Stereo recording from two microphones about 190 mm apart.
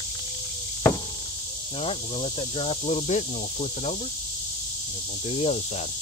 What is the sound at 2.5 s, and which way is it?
Speech, 30° left (ahead or behind).